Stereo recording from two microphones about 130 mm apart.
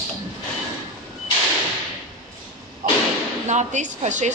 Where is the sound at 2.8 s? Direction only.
80° right.